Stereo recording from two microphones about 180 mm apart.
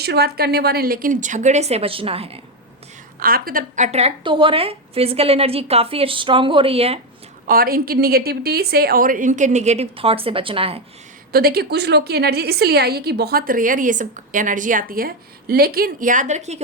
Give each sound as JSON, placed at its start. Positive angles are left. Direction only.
{"t": 0.0, "sound": "a woman's voice", "side_deg": -65}
{"t": 3.2, "sound": "a woman's voice", "side_deg": -55}
{"t": 7.4, "sound": "a woman's voice", "side_deg": -55}
{"t": 11.3, "sound": "a woman's voice", "side_deg": -60}